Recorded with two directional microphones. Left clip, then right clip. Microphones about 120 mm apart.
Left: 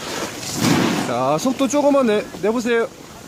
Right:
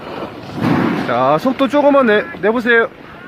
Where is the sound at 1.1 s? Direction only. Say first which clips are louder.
Right 9 dB; 20° left (ahead or behind).